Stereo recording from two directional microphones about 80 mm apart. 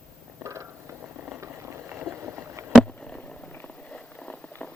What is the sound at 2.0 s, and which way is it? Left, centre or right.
Boat, right.